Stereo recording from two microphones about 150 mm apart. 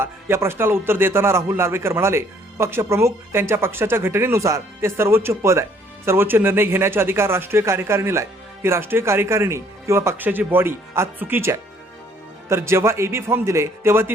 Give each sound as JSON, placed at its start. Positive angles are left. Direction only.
{"t": 0.0, "sound": "a man's voice", "side_deg": -15}